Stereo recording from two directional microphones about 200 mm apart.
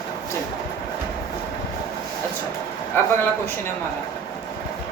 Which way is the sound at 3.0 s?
10° left (ahead or behind).